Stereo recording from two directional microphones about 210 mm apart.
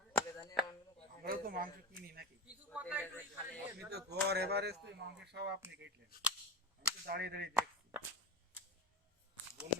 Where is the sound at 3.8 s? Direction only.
50° right (ahead or behind).